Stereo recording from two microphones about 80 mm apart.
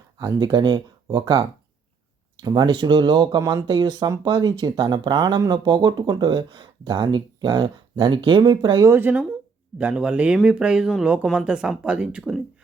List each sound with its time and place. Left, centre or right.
0.3 s speech: right
9.1 s speech: centre